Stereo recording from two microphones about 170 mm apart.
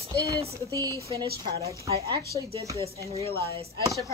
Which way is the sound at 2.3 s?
20° left (ahead or behind).